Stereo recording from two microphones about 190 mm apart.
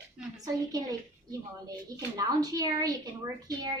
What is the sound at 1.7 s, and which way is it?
A woman's voice, 20° right (ahead or behind).